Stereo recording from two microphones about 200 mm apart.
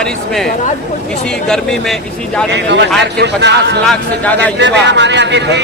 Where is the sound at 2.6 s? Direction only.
60° right (ahead or behind).